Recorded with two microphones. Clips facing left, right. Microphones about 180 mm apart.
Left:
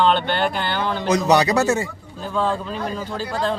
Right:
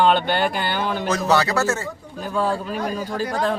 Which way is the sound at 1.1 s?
20° left (ahead or behind).